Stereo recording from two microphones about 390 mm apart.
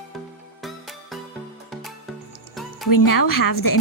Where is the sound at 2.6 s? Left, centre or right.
Centre.